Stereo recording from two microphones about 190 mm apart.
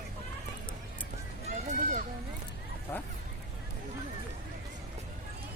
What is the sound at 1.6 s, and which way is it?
Children playing, 40° right (ahead or behind).